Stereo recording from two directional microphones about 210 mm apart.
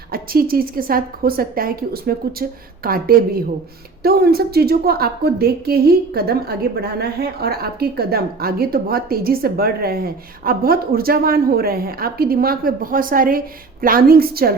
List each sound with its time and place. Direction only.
0.1 s a woman's voice: 45° right (ahead or behind)